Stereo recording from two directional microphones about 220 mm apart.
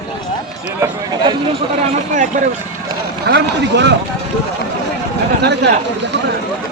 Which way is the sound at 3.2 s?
50° right (ahead or behind).